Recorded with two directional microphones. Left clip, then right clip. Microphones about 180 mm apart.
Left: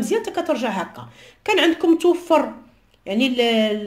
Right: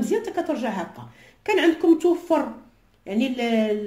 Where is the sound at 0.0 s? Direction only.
30° left (ahead or behind).